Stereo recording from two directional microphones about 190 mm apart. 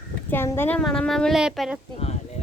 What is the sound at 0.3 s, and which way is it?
A woman's voice, 10° left (ahead or behind).